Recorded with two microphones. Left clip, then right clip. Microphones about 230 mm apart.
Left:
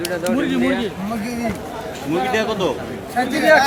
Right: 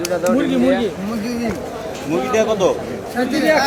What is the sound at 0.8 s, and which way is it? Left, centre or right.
Speech, left.